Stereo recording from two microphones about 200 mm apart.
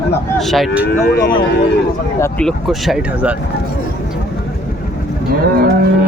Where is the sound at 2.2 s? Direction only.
5° left (ahead or behind).